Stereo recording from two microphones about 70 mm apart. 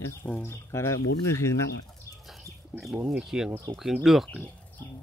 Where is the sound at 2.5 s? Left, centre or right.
Left.